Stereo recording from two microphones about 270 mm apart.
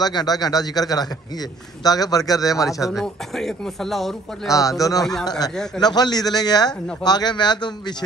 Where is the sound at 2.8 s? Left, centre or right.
Centre.